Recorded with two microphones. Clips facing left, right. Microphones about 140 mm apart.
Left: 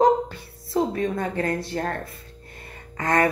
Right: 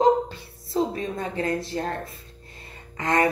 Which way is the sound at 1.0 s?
50° left (ahead or behind).